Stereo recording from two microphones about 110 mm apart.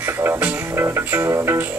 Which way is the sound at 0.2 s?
20° right (ahead or behind).